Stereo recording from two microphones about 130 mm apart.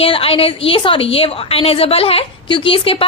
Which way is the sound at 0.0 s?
45° left (ahead or behind).